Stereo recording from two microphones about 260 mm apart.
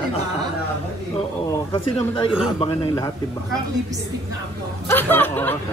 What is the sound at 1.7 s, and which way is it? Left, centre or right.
A man's voice, left.